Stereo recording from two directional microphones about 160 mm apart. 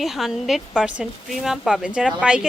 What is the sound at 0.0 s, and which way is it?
A woman's voice, centre (ahead or behind).